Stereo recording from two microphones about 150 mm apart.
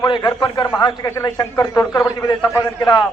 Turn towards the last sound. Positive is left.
turn(degrees=30)  # may be behind; listen again after turning